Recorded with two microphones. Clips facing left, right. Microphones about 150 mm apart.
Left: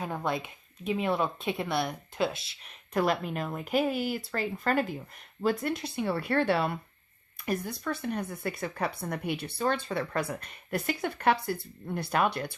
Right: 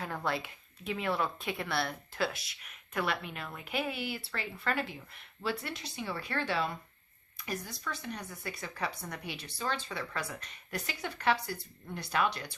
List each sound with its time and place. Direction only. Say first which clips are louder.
0.0 s speech: left 3 dB; 20° left (ahead or behind); by 12.5 s 55° left (ahead or behind)